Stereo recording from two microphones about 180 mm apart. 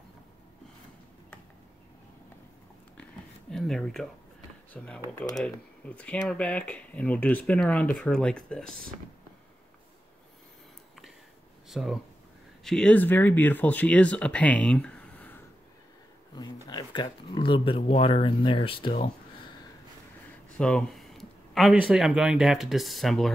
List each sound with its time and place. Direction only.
3.0 s a sound: 5° left (ahead or behind)
4.7 s speech: 5° left (ahead or behind)
11.7 s speech: centre (ahead or behind)
16.6 s speech: 25° left (ahead or behind)
20.5 s speech: 5° left (ahead or behind)